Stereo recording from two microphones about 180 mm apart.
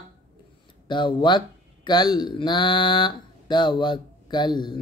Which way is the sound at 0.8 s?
25° left (ahead or behind).